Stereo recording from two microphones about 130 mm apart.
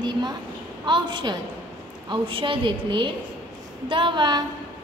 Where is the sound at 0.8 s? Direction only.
35° right (ahead or behind).